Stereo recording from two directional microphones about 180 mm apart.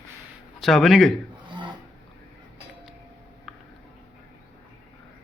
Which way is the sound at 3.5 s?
Centre (ahead or behind).